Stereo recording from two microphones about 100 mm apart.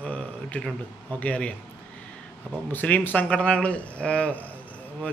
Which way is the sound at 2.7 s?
15° left (ahead or behind).